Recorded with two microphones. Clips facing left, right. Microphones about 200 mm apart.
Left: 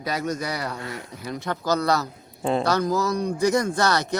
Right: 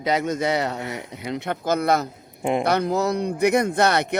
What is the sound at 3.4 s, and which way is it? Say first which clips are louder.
Speech: right 3 dB; 60° right (ahead or behind).